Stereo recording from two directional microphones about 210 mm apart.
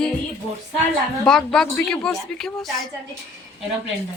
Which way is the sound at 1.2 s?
5° left (ahead or behind).